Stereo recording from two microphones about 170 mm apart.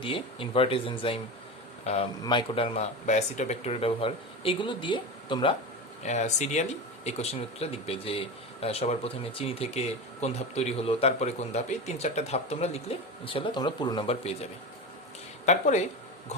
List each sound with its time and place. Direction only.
0.0 s speech: 30° left (ahead or behind)
2.2 s speech: 30° left (ahead or behind)
6.0 s speech: 45° left (ahead or behind)
15.4 s speech: 45° left (ahead or behind)